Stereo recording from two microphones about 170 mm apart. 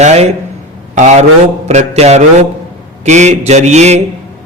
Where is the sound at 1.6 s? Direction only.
40° right (ahead or behind).